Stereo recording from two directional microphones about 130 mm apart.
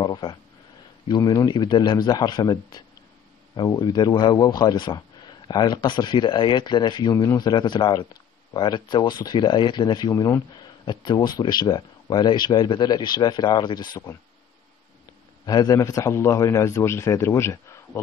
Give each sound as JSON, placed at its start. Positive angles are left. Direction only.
{"t": 0.0, "sound": "a sound", "side_deg": 35}
{"t": 1.0, "sound": "speech", "side_deg": 30}
{"t": 15.4, "sound": "a man's voice", "side_deg": 30}